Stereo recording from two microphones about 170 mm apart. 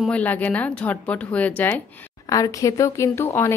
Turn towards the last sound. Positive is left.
turn(degrees=15)  # may be behind; listen again after turning